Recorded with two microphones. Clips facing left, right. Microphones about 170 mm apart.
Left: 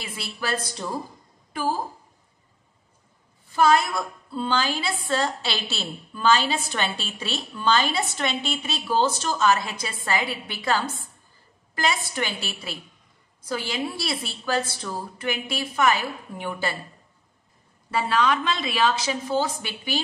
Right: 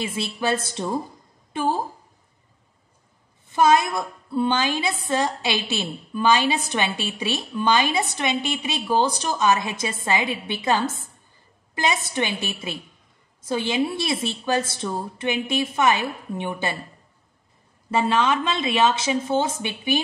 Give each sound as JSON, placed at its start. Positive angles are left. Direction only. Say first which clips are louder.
{"t": 0.0, "sound": "a woman's voice", "louder": "right 7 dB", "side_deg": -25}
{"t": 3.5, "sound": "a woman's voice", "louder": "right 2 dB", "side_deg": -20}
{"t": 17.9, "sound": "a woman's voice", "louder": "right 2 dB", "side_deg": -25}